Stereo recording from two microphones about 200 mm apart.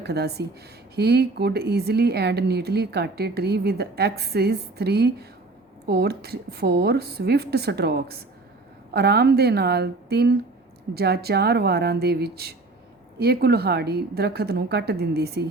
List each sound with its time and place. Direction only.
0.0 s speech: 55° right (ahead or behind)